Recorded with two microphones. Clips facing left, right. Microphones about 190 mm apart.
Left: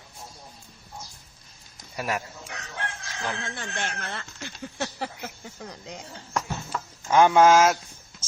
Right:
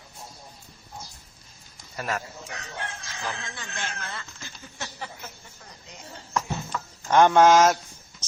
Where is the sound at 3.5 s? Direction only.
55° left (ahead or behind); by 6.0 s 85° left.